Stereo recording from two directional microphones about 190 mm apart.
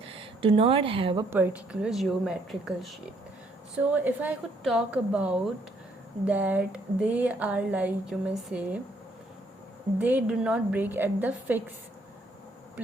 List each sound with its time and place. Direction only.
0.0 s speech: 30° right (ahead or behind)
1.3 s a woman's voice: 10° right (ahead or behind)
3.9 s speech: 10° right (ahead or behind)
10.0 s speech: 10° right (ahead or behind)